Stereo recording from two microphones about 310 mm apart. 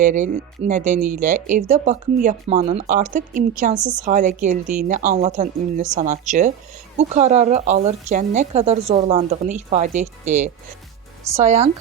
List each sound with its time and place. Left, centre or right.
0.0 s speech: right